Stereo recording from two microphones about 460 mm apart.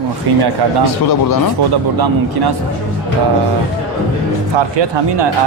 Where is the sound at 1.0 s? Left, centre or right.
Left.